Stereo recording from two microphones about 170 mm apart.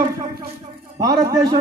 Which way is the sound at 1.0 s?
20° right (ahead or behind).